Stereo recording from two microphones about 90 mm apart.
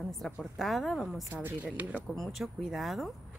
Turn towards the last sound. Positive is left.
turn(degrees=0)  # may be behind; listen again after turning